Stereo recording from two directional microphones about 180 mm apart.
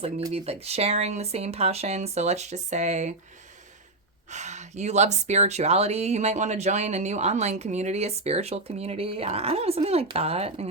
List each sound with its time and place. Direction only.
0.3 s speech: 35° right (ahead or behind)
4.3 s speech: 40° right (ahead or behind)